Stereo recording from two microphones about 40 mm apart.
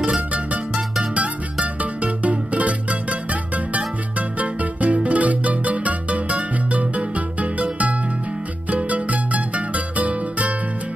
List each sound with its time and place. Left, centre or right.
1.8 s music: right